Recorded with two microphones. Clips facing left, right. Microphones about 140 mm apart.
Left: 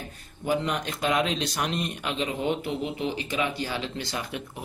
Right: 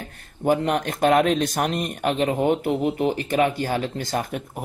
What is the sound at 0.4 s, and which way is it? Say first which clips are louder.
Speech: right 6 dB; 50° right (ahead or behind).